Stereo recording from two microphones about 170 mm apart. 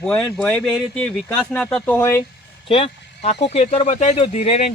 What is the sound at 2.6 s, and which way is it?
Speech, 35° left (ahead or behind).